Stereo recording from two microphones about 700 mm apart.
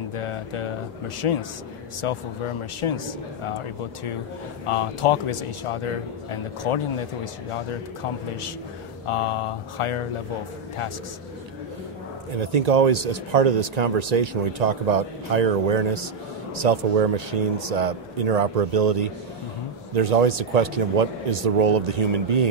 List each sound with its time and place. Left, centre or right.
0.1 s speech: left
4.6 s speech: left
9.0 s speech: left
12.4 s speech: right